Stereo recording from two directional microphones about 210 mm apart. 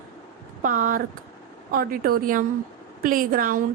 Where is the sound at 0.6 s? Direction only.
40° right (ahead or behind).